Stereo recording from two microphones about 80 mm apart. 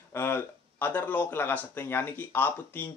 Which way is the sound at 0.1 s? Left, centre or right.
Left.